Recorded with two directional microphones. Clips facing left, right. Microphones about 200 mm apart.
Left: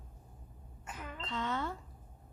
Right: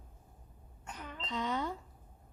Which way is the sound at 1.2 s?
15° right (ahead or behind).